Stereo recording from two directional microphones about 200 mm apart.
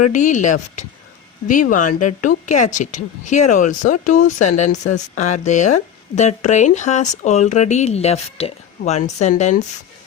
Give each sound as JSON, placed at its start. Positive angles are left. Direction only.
{"t": 0.1, "sound": "speech", "side_deg": 40}